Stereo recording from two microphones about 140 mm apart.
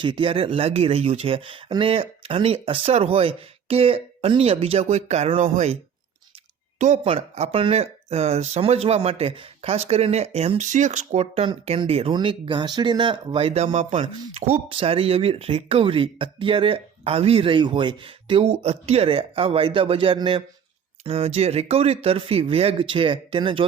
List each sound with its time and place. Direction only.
0.0 s speech: 35° right (ahead or behind); by 5.7 s 50° right (ahead or behind)
6.7 s speech: 60° right (ahead or behind)
7.0 s speech: 40° right (ahead or behind)